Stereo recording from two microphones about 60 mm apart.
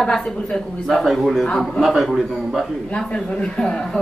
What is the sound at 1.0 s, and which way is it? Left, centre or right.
Speech, centre.